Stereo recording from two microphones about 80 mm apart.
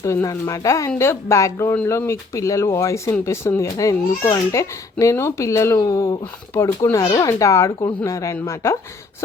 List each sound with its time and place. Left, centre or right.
0.0 s speech: left
6.9 s a child's voice: left
7.3 s speech: left